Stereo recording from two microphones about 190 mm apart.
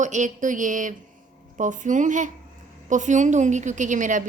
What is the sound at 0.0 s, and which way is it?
A woman's voice, 40° right (ahead or behind).